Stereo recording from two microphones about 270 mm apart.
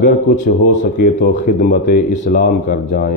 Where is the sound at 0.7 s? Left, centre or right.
Left.